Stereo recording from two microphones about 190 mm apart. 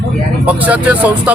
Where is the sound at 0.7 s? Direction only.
5° right (ahead or behind).